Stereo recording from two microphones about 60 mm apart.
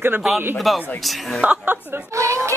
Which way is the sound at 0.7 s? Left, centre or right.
Centre.